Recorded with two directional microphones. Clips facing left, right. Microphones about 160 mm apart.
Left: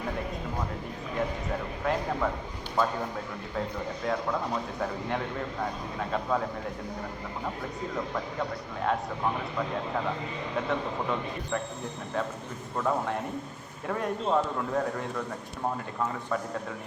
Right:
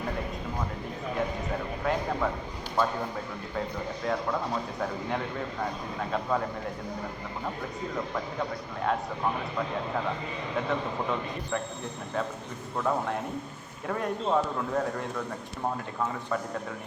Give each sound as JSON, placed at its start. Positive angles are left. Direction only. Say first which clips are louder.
{"t": 1.8, "sound": "speech", "louder": "even", "side_deg": 0}
{"t": 7.9, "sound": "speech", "louder": "even", "side_deg": 0}
{"t": 12.7, "sound": "speech", "louder": "even", "side_deg": 0}